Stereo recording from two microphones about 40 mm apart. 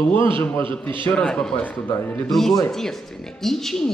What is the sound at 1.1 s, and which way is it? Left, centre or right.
Speech, left.